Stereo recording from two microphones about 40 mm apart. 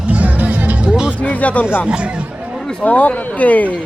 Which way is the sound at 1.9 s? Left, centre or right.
Right.